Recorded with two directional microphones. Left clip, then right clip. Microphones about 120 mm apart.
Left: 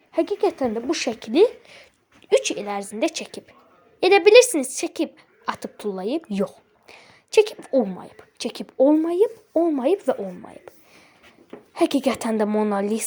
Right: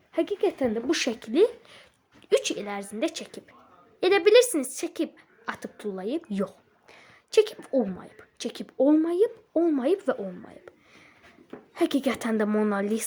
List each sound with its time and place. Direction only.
0.1 s a woman's voice: centre (ahead or behind)
0.9 s a woman's voice: 15° right (ahead or behind)
1.2 s a woman's voice: 25° left (ahead or behind)
2.3 s a woman's voice: 5° left (ahead or behind)
2.6 s a woman's voice: 20° left (ahead or behind)
7.9 s a woman's voice: 15° left (ahead or behind); by 10.2 s centre (ahead or behind)
10.4 s a sound: 10° left (ahead or behind)
11.7 s a woman's voice: 10° left (ahead or behind)